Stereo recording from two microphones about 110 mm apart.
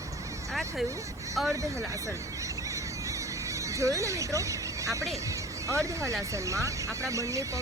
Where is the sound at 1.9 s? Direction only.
30° right (ahead or behind).